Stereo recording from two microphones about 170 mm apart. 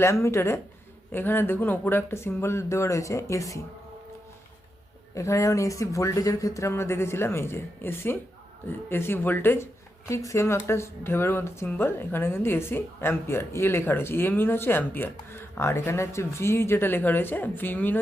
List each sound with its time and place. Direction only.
0.0 s speech: 15° left (ahead or behind)
5.1 s speech: 20° left (ahead or behind)